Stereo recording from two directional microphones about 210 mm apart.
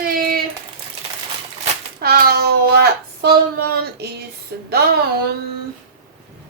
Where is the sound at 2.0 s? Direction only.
45° right (ahead or behind).